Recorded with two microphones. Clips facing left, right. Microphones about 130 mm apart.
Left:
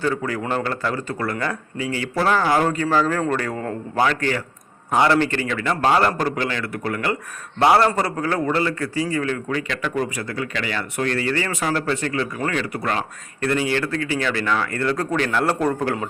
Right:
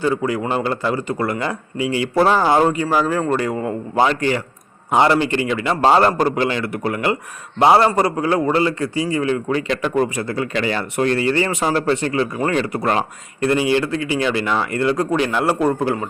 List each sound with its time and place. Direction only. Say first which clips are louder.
0.0 s a man's voice: right 4 dB; 15° right (ahead or behind)
2.7 s a man's voice: right 1 dB; 10° right (ahead or behind); by 13.1 s 35° right (ahead or behind)
13.4 s speech: right 4 dB; 20° right (ahead or behind)